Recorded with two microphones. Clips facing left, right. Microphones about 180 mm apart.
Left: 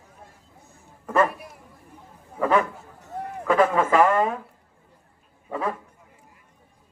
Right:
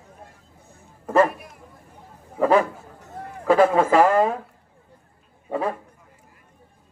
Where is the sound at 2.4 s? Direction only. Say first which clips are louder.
Right 3 dB; 35° right (ahead or behind).